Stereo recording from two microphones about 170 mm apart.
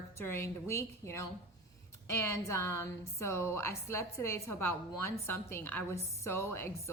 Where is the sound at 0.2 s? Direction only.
15° left (ahead or behind).